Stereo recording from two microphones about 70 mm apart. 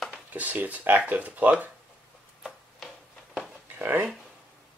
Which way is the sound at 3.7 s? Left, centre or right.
Right.